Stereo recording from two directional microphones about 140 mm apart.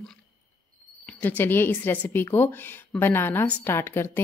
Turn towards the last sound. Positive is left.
turn(degrees=15)  # may be behind; listen again after turning